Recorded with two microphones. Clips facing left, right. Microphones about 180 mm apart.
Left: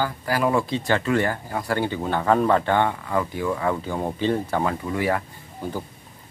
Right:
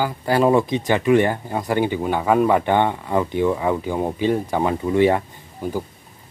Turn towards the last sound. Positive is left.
turn(degrees=-15)  # may be behind; listen again after turning